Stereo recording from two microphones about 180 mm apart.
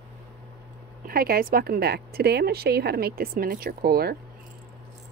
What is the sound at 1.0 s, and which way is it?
Speech, 55° right (ahead or behind).